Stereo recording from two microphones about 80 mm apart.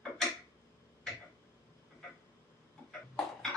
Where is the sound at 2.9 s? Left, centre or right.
Centre.